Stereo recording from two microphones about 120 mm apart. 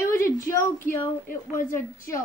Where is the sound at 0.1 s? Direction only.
20° left (ahead or behind).